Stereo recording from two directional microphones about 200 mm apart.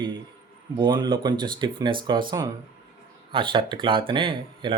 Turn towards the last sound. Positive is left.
turn(degrees=-25)  # may be behind; listen again after turning